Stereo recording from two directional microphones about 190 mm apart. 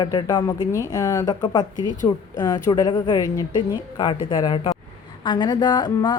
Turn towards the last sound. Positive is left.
turn(degrees=20)  # may be behind; listen again after turning